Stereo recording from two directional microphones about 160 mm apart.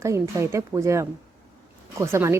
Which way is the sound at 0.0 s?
20° right (ahead or behind).